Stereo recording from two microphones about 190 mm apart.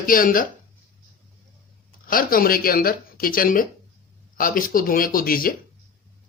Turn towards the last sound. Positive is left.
turn(degrees=50)  # may be behind; listen again after turning